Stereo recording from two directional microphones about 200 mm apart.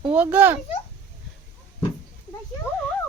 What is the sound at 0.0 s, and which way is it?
Speech, 5° right (ahead or behind).